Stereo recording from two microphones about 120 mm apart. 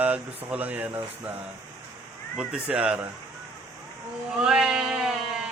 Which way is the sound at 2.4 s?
5° right (ahead or behind).